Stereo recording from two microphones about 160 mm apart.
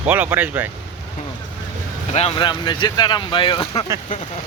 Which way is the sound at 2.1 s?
40° left (ahead or behind).